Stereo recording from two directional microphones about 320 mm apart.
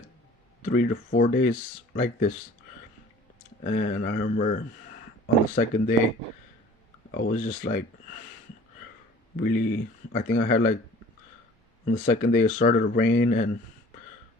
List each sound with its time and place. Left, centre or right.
0.6 s speech: left
3.6 s speech: left
5.5 s speech: left
7.1 s speech: left
9.4 s speech: left
11.9 s speech: left